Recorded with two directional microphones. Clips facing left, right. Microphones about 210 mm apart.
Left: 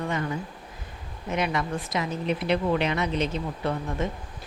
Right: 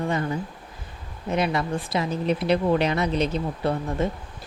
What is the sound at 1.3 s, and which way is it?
A woman's voice, 35° right (ahead or behind).